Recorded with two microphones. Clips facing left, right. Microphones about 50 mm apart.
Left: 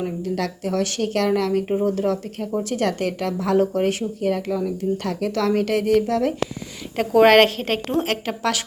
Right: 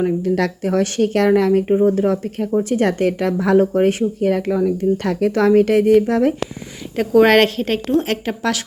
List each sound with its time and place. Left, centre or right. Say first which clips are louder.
0.0 s speech: right 7 dB; right
1.6 s speech: right 7 dB; centre
1.9 s speech: right 5 dB; right
5.3 s speech: right 7 dB; right
6.9 s a woman's voice: right 1 dB; centre